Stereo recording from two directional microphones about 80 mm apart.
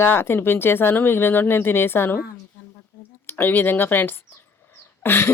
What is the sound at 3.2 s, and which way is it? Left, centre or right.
Speech, left.